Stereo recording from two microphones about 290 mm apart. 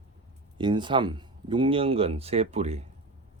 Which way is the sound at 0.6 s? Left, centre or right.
Centre.